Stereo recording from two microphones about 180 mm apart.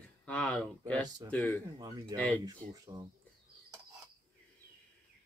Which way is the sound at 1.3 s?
5° left (ahead or behind).